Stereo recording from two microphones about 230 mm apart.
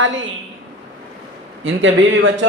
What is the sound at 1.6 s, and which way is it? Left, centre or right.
Speech, right.